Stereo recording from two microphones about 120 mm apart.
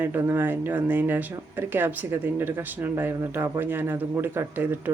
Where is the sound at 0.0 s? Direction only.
20° right (ahead or behind).